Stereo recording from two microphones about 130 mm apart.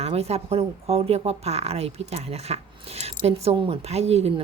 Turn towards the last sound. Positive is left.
turn(degrees=-55)  # may be behind; listen again after turning